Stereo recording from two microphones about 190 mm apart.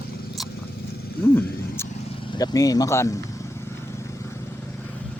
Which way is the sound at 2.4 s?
20° left (ahead or behind).